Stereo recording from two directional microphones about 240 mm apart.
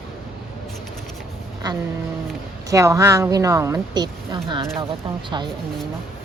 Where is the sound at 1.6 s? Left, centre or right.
Centre.